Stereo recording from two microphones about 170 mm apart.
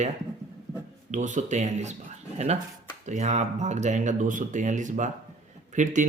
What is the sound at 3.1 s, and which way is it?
Speech, 40° right (ahead or behind).